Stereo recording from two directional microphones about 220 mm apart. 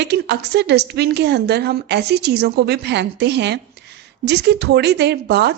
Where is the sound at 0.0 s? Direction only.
50° right (ahead or behind).